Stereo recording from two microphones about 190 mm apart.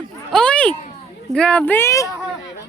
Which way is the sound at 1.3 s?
5° left (ahead or behind).